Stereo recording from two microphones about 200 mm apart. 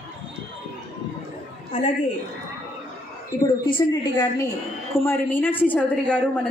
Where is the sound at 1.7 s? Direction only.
35° left (ahead or behind).